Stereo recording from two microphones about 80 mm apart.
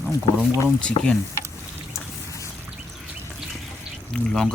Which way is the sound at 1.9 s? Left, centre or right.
Left.